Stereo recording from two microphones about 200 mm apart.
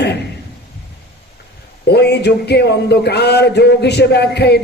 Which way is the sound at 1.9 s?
55° left (ahead or behind).